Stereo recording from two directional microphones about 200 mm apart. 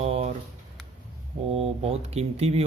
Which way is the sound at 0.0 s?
30° right (ahead or behind).